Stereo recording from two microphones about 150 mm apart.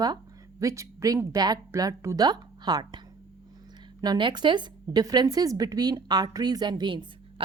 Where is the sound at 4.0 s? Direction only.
30° right (ahead or behind).